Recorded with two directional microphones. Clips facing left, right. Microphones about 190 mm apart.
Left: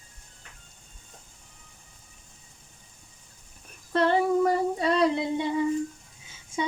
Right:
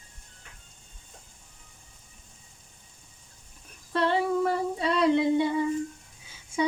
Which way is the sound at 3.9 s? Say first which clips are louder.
Left 3 dB; 45° left (ahead or behind).